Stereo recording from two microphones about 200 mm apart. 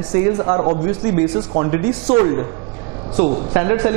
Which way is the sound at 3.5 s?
20° right (ahead or behind).